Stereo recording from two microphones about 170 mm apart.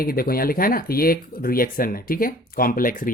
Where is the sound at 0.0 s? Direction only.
60° left (ahead or behind).